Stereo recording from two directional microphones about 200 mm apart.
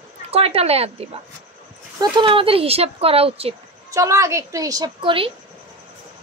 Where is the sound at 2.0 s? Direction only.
25° right (ahead or behind).